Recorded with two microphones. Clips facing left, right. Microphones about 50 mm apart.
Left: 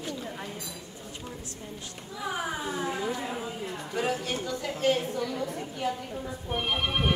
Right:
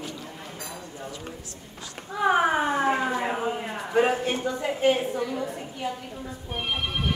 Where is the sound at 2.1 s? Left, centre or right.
Right; by 6.8 s centre.